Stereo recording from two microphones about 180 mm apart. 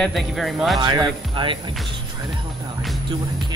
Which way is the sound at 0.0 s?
Centre (ahead or behind).